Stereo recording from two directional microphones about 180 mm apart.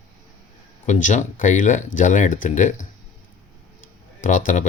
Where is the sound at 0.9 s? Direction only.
45° left (ahead or behind).